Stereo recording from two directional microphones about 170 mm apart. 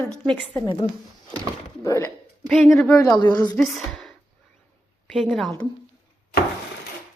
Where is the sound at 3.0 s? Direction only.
25° left (ahead or behind).